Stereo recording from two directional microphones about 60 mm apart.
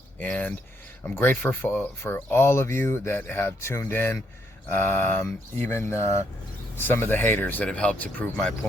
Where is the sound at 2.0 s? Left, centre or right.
Left.